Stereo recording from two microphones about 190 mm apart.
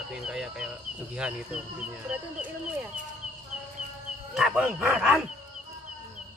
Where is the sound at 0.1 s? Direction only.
5° right (ahead or behind).